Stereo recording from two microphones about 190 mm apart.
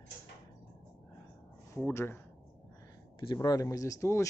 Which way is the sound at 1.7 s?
15° left (ahead or behind).